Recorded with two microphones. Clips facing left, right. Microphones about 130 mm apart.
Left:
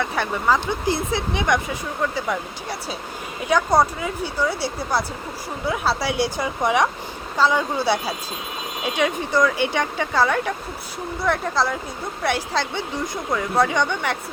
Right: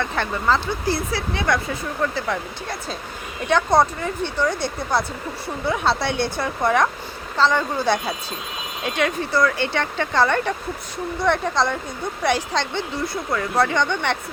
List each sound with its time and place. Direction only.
0.0 s speech: 10° left (ahead or behind)